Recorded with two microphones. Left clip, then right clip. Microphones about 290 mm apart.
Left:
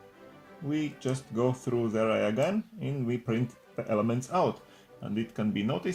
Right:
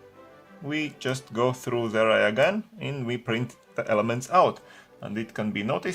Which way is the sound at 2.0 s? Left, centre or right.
Right.